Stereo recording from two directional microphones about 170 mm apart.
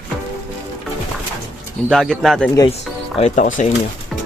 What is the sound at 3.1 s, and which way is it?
Speech, 45° left (ahead or behind).